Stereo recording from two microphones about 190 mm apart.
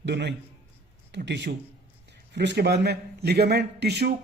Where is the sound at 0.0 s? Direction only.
60° right (ahead or behind).